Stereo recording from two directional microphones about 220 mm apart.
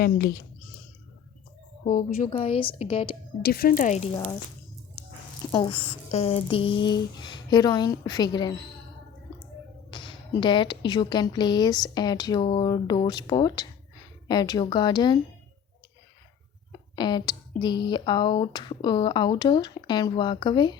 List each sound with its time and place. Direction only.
0.0 s speech: 40° left (ahead or behind)
1.8 s speech: 35° left (ahead or behind)
2.3 s speech: 25° left (ahead or behind)
3.4 s speech: 45° left (ahead or behind)
5.5 s speech: 20° left (ahead or behind)
9.9 s speech: 20° left (ahead or behind)
16.9 s speech: 20° left (ahead or behind)